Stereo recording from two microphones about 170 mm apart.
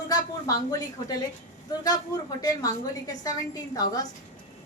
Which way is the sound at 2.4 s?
20° left (ahead or behind).